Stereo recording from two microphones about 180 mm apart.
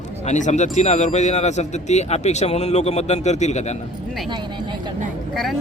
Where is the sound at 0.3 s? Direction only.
40° left (ahead or behind).